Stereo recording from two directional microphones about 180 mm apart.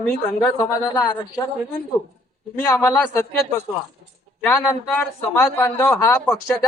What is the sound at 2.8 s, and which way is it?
Speech, 15° left (ahead or behind).